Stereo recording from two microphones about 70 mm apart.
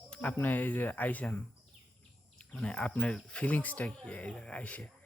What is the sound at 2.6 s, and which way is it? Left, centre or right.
Speech, centre.